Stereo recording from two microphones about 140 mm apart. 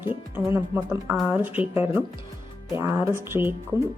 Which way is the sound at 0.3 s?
15° right (ahead or behind).